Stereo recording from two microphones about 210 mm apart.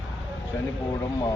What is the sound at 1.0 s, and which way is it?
Speech, 15° left (ahead or behind).